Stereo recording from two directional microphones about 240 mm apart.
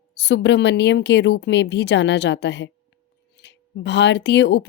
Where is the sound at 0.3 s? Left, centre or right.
Left.